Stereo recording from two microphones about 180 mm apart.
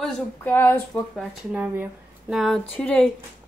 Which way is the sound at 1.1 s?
5° right (ahead or behind).